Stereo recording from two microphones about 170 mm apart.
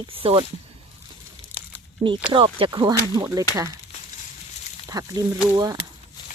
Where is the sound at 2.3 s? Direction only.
30° right (ahead or behind).